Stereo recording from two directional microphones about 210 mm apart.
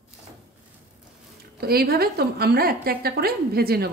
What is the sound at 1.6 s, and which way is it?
A woman's voice, 45° right (ahead or behind).